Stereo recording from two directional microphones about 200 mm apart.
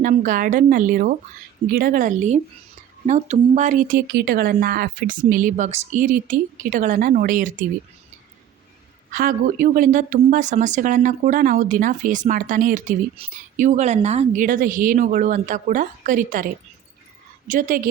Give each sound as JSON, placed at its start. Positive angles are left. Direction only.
{"t": 0.0, "sound": "speech", "side_deg": -40}
{"t": 9.1, "sound": "speech", "side_deg": -40}
{"t": 17.5, "sound": "speech", "side_deg": -40}